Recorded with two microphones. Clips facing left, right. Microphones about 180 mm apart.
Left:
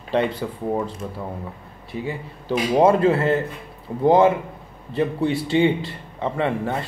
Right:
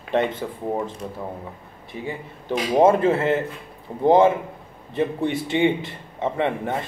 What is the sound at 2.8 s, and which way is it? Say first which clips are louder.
A man's voice: left 1 dB; 20° right (ahead or behind).